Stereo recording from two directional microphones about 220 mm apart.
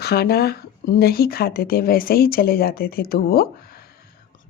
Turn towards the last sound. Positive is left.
turn(degrees=45)  # may be behind; listen again after turning